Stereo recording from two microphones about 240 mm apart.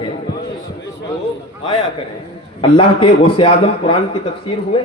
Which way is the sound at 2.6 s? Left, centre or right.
Left.